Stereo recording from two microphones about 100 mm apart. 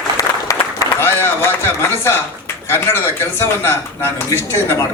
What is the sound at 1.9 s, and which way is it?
Speech, 25° left (ahead or behind).